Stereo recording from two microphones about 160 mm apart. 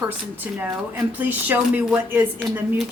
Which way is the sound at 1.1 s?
10° right (ahead or behind).